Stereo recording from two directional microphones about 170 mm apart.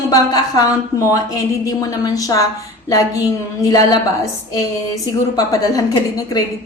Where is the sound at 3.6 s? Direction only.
20° left (ahead or behind).